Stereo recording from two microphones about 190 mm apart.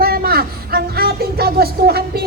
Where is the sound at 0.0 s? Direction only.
55° right (ahead or behind).